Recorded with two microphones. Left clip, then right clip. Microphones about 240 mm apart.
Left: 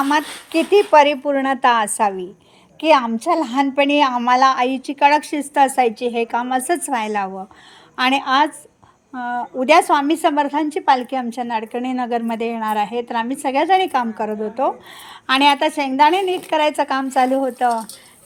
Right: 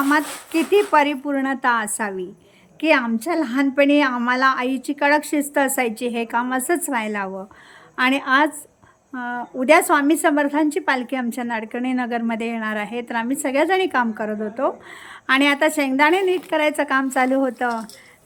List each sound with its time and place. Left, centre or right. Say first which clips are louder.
0.1 s a woman's voice: left 1 dB; centre